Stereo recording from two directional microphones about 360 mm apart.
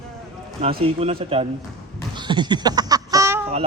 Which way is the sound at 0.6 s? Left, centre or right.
Centre.